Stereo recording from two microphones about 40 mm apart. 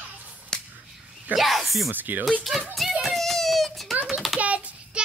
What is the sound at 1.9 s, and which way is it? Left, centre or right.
Speech, right.